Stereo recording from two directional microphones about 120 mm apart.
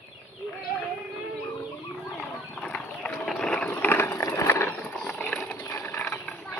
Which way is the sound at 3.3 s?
5° left (ahead or behind).